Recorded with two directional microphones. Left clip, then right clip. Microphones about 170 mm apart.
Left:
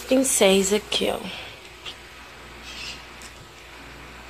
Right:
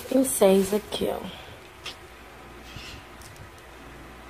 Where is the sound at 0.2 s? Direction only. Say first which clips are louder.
Right 1 dB; 15° right (ahead or behind).